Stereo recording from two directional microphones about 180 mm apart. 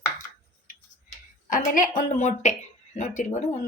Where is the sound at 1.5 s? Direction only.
45° left (ahead or behind).